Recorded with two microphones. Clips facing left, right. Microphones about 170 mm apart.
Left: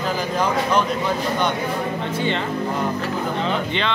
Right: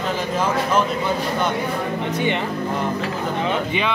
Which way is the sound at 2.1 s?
15° right (ahead or behind).